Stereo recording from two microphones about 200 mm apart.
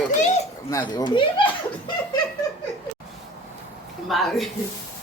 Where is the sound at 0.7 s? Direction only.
15° left (ahead or behind).